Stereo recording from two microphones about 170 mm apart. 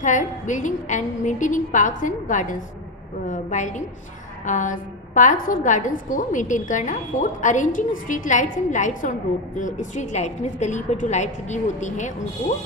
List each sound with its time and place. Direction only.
0.0 s a woman's voice: 45° left (ahead or behind)